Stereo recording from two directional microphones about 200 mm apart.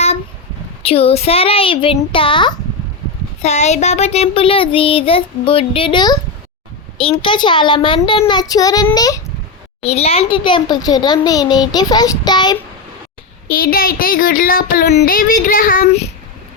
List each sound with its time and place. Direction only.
0.8 s child singing: 30° left (ahead or behind)
3.4 s child singing: 35° left (ahead or behind); by 9.2 s 15° left (ahead or behind)
9.8 s child singing: 30° left (ahead or behind)
13.5 s a sound: 45° left (ahead or behind)